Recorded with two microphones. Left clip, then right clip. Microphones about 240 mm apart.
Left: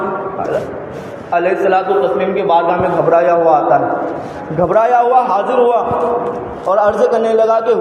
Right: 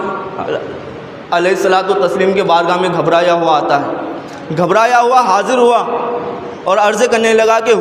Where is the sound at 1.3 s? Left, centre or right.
Right.